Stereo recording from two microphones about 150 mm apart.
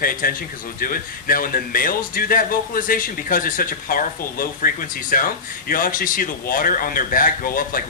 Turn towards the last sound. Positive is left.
turn(degrees=70)  # may be behind; listen again after turning